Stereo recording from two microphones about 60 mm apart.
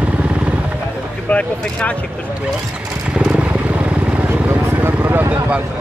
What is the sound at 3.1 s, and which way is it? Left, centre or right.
Vehicle, centre.